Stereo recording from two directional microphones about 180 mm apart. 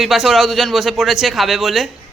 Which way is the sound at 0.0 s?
Centre (ahead or behind).